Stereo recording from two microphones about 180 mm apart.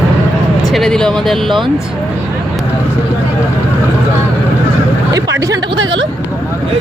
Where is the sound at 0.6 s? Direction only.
Centre (ahead or behind).